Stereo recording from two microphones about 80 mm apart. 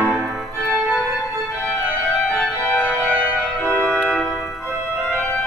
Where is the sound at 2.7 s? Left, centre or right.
Centre.